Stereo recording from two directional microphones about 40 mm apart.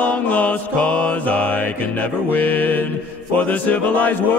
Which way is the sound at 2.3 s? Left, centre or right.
Left.